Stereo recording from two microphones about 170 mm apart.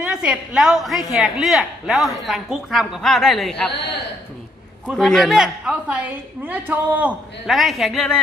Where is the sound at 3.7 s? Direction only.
85° left.